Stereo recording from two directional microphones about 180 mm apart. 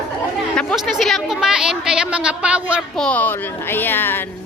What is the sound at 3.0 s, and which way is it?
A woman's voice, 10° left (ahead or behind).